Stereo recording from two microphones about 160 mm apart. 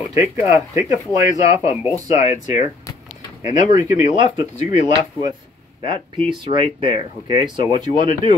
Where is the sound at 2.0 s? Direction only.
45° left (ahead or behind).